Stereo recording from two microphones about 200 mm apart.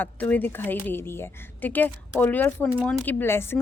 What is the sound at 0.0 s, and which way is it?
A woman's voice, 10° left (ahead or behind).